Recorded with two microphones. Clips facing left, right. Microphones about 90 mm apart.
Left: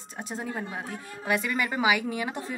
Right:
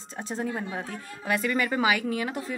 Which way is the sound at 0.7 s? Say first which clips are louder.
Right 1 dB; 15° left (ahead or behind).